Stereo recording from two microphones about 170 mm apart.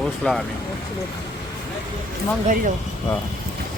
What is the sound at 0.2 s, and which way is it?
Speech, 5° left (ahead or behind).